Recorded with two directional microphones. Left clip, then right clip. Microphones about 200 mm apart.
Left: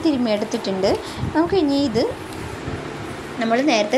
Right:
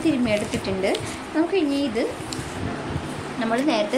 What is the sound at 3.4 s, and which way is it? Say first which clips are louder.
Speech: left 4 dB; 15° left (ahead or behind).